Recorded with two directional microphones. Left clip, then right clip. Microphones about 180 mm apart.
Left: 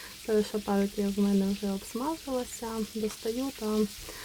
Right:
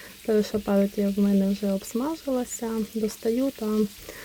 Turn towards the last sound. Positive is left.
turn(degrees=-15)  # may be behind; listen again after turning